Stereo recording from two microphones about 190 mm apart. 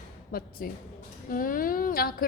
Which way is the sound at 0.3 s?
50° left (ahead or behind).